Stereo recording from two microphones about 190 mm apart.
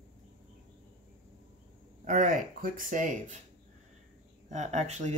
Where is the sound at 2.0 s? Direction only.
45° right (ahead or behind).